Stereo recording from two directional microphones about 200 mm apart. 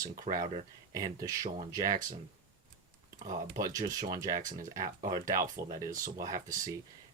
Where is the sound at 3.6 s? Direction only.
20° right (ahead or behind).